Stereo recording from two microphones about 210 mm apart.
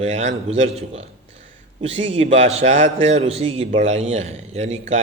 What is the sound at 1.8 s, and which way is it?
A man's voice, 25° right (ahead or behind).